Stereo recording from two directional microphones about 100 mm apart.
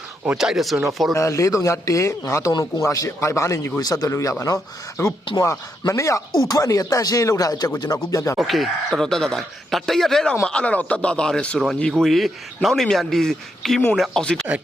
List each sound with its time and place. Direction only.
0.3 s a man's voice: 5° right (ahead or behind)
1.1 s speech: 30° left (ahead or behind)
2.5 s a man's voice: 45° left (ahead or behind)
8.4 s a man's voice: centre (ahead or behind)